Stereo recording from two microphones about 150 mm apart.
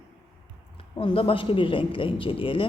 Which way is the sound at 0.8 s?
35° left (ahead or behind).